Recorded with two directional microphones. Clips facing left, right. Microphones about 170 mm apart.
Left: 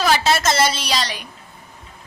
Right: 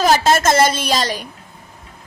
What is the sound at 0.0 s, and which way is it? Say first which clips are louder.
A woman's voice: right 4 dB; 45° right (ahead or behind).